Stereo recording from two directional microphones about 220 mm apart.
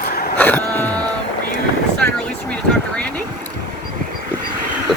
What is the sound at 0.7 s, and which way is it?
Throat clearing, 10° left (ahead or behind).